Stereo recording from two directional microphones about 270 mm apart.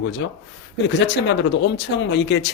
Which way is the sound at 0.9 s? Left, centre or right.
Left.